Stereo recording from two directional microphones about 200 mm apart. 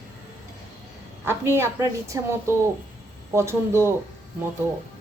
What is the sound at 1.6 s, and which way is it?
A woman's voice, 15° right (ahead or behind).